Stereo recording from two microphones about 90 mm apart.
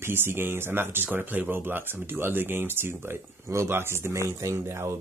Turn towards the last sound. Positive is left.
turn(degrees=-30)  # may be behind; listen again after turning